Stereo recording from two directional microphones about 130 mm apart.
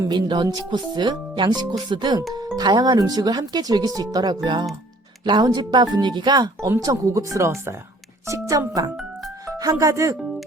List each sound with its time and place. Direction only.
0.0 s speech: 35° right (ahead or behind)
9.2 s music: 25° right (ahead or behind)